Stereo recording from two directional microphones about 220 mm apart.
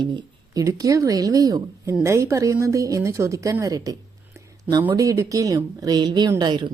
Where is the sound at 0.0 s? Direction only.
20° right (ahead or behind).